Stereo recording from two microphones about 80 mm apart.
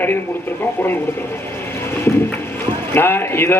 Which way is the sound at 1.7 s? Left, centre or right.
Left.